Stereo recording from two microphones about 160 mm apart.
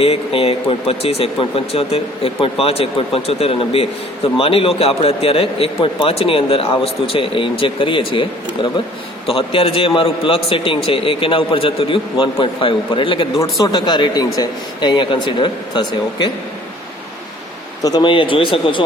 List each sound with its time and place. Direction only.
0.0 s a man's voice: 40° left (ahead or behind)
17.8 s a man's voice: 25° left (ahead or behind)